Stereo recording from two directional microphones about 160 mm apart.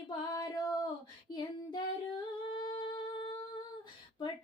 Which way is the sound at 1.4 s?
25° left (ahead or behind).